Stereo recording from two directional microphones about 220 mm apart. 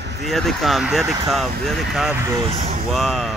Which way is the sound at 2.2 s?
15° right (ahead or behind).